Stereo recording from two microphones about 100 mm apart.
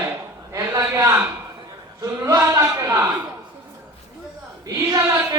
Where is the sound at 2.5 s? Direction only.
25° right (ahead or behind).